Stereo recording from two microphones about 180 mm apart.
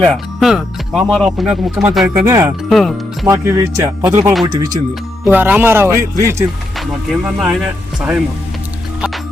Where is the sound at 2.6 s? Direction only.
Centre (ahead or behind).